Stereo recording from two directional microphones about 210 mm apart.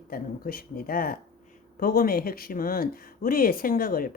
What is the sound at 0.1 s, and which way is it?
Speech, 45° left (ahead or behind).